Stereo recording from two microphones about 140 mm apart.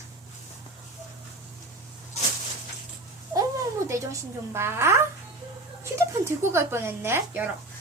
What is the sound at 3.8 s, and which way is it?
A woman's voice, 20° right (ahead or behind).